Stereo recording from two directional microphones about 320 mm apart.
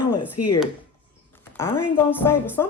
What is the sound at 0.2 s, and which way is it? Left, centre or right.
Speech, left.